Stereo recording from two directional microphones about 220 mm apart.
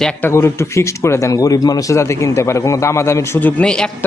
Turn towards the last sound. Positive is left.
turn(degrees=5)  # may be behind; listen again after turning